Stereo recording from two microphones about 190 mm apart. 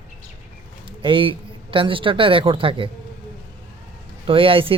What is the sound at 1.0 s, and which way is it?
A man's voice, 25° right (ahead or behind).